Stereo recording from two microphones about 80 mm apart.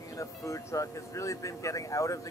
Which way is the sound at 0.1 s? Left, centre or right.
Left.